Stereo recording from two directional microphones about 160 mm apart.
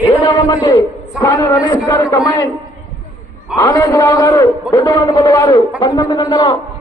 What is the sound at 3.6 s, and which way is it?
A man's voice, 20° left (ahead or behind).